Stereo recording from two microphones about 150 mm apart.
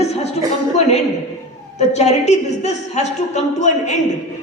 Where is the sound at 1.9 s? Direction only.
50° left (ahead or behind).